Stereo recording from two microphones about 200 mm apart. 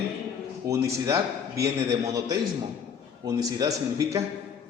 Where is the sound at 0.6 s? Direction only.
15° right (ahead or behind).